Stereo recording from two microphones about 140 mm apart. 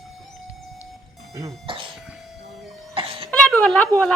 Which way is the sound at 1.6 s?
40° right (ahead or behind).